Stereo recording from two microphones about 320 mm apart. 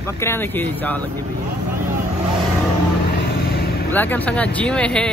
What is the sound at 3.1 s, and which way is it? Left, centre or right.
Vehicle, left.